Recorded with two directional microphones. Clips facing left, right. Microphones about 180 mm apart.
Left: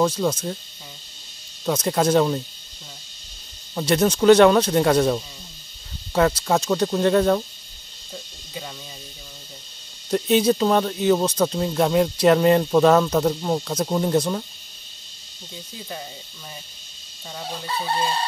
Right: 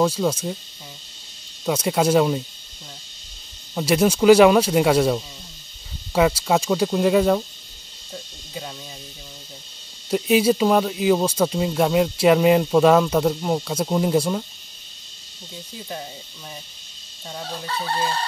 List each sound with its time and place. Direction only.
0.0 s speech: 5° right (ahead or behind)
1.7 s speech: 10° right (ahead or behind)
3.7 s speech: 5° right (ahead or behind)
8.1 s a sound: centre (ahead or behind)
10.0 s speech: 5° right (ahead or behind)
17.6 s chicken: 15° left (ahead or behind)